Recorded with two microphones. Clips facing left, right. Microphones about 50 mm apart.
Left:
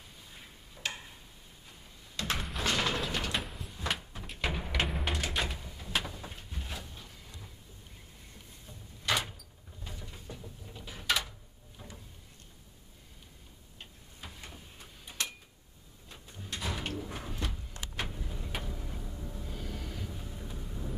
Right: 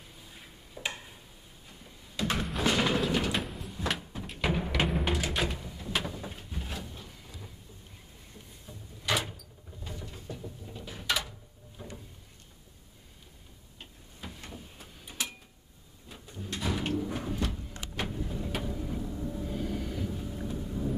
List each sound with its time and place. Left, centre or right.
0.0 s tick-tock: centre
1.7 s a sound: centre
2.6 s door: centre
8.6 s door: centre
10.4 s a sound: centre
13.7 s tick-tock: centre
16.1 s sliding door: centre
20.4 s vehicle: centre